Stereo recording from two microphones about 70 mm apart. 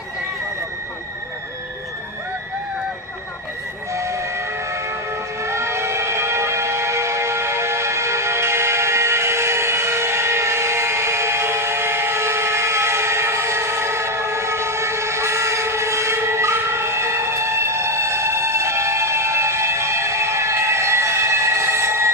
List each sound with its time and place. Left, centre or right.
3.9 s train: right
5.4 s train: right